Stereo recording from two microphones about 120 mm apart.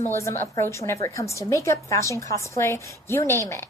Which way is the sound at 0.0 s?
25° left (ahead or behind).